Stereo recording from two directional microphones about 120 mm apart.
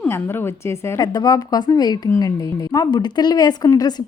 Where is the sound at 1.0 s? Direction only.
35° left (ahead or behind).